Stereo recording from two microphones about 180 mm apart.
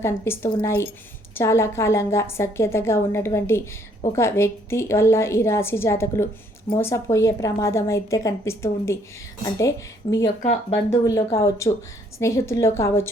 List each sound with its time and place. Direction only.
0.0 s a woman's voice: 15° left (ahead or behind)